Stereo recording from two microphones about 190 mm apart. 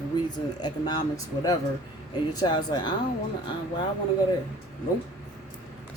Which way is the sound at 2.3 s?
25° left (ahead or behind).